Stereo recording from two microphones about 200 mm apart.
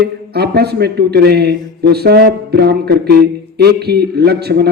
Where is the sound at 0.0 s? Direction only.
55° right (ahead or behind).